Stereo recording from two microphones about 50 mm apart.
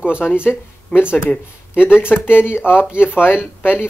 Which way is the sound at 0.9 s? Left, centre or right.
Left.